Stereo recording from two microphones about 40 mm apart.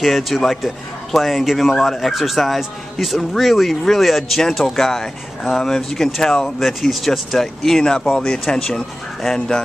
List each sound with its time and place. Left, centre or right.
0.0 s a man's voice: centre
7.8 s speech: centre